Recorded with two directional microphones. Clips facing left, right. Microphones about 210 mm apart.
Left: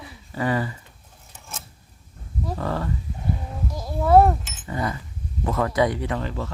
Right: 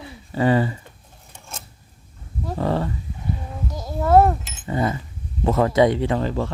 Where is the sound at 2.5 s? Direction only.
25° right (ahead or behind).